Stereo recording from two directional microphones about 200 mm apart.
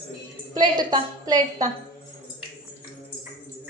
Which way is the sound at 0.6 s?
20° right (ahead or behind).